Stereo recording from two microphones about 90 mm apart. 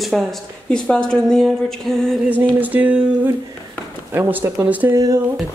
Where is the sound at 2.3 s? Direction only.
20° right (ahead or behind).